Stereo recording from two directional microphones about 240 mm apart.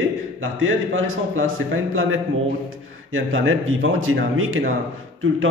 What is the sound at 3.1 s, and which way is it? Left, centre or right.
A man's voice, right.